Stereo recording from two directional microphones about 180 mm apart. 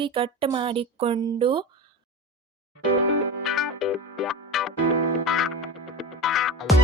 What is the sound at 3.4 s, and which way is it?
Music, centre (ahead or behind).